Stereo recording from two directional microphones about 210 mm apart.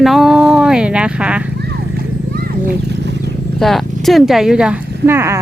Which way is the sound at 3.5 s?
Centre (ahead or behind).